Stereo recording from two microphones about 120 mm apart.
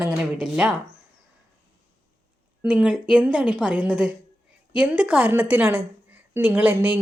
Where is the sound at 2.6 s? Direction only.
10° right (ahead or behind).